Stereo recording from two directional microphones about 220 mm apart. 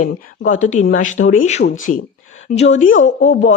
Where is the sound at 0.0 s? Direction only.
35° left (ahead or behind).